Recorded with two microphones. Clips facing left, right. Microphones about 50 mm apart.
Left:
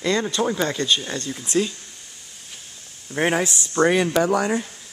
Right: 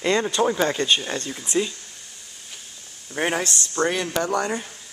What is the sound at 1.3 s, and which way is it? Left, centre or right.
Speech, centre.